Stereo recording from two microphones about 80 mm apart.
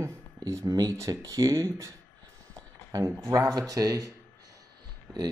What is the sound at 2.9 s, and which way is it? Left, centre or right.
Speech, right.